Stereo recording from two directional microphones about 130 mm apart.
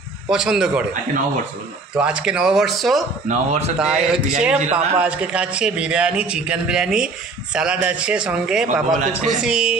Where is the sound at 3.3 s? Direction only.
60° right (ahead or behind).